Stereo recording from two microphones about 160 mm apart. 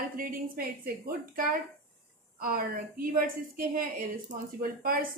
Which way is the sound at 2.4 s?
65° right (ahead or behind).